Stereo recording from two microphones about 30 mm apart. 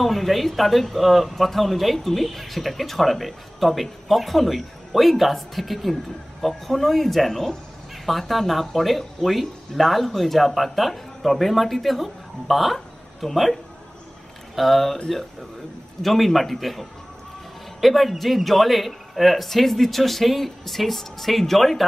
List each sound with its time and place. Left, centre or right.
0.0 s speech: centre
12.7 s a sound: centre
14.5 s speech: centre
16.0 s speech: centre